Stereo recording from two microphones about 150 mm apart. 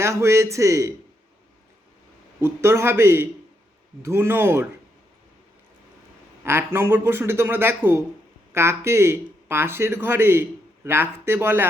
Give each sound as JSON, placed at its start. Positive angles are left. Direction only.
{"t": 0.0, "sound": "speech", "side_deg": -20}
{"t": 2.4, "sound": "speech", "side_deg": -15}
{"t": 6.4, "sound": "speech", "side_deg": -15}